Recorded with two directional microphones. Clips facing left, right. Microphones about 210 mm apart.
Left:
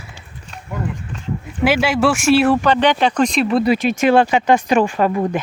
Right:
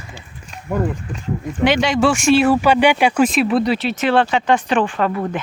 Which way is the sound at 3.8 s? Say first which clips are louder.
Left 3 dB; 10° left (ahead or behind).